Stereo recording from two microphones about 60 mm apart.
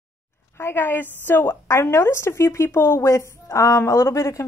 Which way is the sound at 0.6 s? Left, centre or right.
Left.